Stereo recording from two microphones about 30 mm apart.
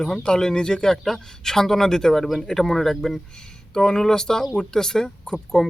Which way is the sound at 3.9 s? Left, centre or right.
Centre.